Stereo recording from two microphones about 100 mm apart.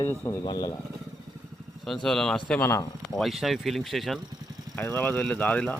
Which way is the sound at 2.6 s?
25° left (ahead or behind).